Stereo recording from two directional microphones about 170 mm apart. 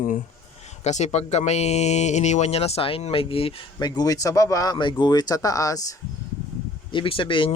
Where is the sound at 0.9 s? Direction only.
45° left (ahead or behind); by 5.8 s 20° left (ahead or behind).